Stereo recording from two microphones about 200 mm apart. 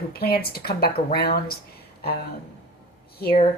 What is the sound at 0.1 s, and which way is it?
A woman's voice, 50° left (ahead or behind).